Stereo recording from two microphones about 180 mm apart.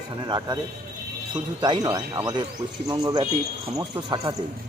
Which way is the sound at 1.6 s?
25° right (ahead or behind).